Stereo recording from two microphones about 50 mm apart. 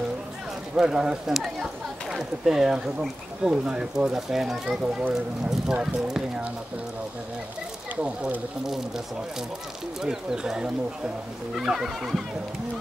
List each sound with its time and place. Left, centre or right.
0.7 s speech: centre
4.6 s speech: right
5.5 s speech: centre
7.9 s speech: right
8.6 s speech: centre
10.0 s speech: centre